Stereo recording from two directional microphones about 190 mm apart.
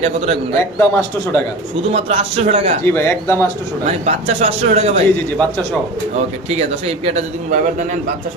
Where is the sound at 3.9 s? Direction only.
35° right (ahead or behind).